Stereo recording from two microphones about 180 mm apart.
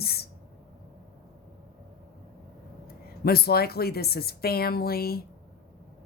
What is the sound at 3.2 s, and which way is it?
Speech, 60° left (ahead or behind).